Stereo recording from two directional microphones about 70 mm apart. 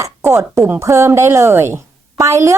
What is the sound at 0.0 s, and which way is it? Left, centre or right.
A woman's voice, right.